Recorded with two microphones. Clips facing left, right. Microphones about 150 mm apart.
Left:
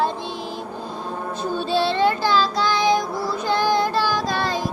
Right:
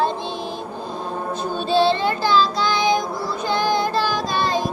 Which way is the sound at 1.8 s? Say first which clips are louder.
Even; 20° right (ahead or behind).